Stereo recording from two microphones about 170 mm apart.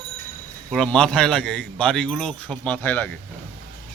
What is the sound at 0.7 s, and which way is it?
A man's voice, 5° left (ahead or behind).